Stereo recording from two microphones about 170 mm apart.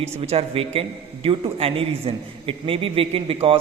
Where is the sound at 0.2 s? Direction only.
35° right (ahead or behind).